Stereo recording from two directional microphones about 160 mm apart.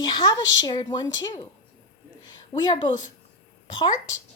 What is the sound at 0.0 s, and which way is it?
A woman's voice, 30° left (ahead or behind).